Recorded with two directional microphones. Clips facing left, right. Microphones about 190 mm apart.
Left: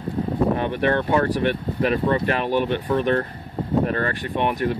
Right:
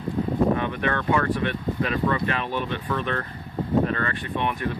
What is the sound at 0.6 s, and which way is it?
Speech, 30° left (ahead or behind).